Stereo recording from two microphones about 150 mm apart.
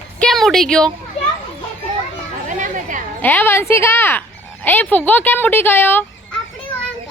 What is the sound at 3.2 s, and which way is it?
Speech, 10° left (ahead or behind).